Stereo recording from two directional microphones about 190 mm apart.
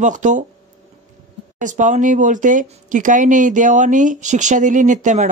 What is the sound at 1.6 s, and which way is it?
Speech, 40° right (ahead or behind).